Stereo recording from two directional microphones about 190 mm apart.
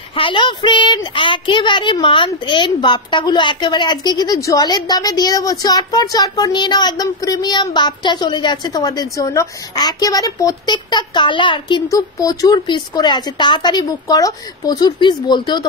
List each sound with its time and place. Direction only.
0.1 s speech: 25° left (ahead or behind)